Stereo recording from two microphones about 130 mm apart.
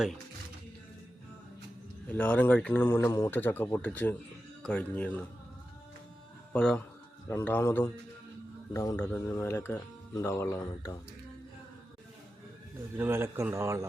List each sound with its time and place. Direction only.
2.0 s speech: 15° left (ahead or behind)
6.5 s speech: 10° left (ahead or behind)
13.0 s speech: 20° right (ahead or behind)